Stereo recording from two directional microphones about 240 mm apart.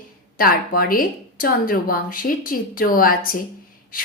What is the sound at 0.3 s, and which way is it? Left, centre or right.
A woman's voice, left.